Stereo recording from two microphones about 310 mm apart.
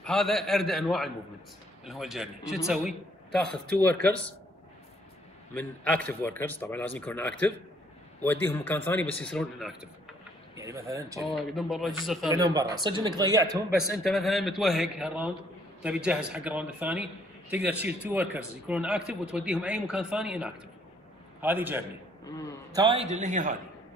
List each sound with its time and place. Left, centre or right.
0.0 s speech: centre
5.5 s speech: centre
12.3 s a man's voice: centre